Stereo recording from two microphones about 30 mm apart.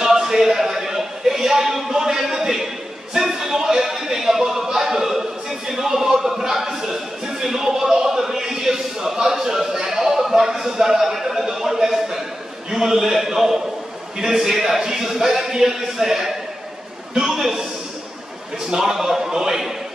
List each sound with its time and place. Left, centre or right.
0.0 s a sound: centre
12.7 s a man's voice: centre
18.8 s a man's voice: centre